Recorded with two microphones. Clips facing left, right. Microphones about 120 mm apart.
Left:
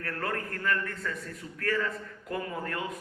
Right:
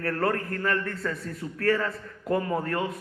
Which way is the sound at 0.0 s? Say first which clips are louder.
Right 7 dB; 35° right (ahead or behind).